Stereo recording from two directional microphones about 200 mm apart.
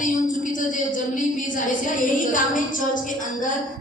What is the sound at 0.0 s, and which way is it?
A woman's voice, 40° left (ahead or behind).